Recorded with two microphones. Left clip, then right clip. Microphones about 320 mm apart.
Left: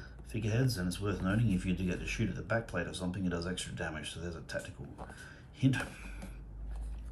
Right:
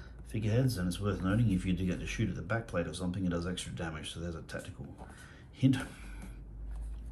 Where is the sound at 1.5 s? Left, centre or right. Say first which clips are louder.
Right 1 dB; centre.